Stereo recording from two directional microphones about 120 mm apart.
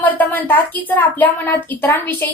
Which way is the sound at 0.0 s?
15° left (ahead or behind).